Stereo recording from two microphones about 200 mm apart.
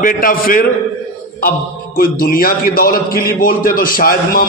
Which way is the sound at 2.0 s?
45° left (ahead or behind).